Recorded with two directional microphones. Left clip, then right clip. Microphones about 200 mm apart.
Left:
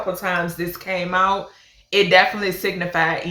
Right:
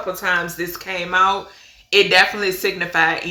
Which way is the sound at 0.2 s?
20° right (ahead or behind).